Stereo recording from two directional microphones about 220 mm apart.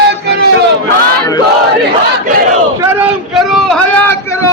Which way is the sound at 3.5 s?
5° left (ahead or behind).